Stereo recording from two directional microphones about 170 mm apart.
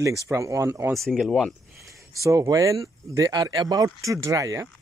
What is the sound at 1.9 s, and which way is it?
Speech, 20° right (ahead or behind).